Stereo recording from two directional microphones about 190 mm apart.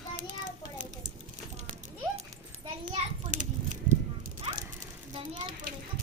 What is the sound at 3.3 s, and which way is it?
Children playing, 40° right (ahead or behind).